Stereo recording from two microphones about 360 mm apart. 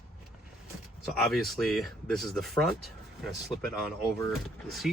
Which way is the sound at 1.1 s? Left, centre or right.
Centre.